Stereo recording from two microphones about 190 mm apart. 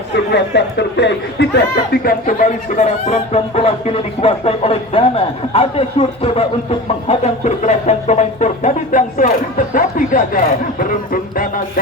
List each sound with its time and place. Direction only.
0.3 s speech: 65° left (ahead or behind); by 11.6 s 45° left (ahead or behind)